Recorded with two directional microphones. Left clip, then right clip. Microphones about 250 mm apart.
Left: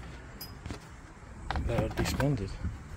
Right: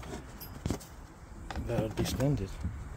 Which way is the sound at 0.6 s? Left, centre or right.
Right.